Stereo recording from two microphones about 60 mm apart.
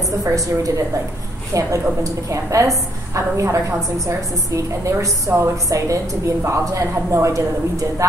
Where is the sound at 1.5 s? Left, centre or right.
Right.